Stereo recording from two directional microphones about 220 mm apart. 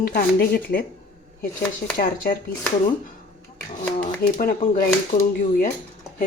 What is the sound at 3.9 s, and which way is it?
Speech, 40° left (ahead or behind).